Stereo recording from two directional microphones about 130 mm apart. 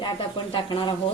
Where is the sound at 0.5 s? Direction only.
40° left (ahead or behind).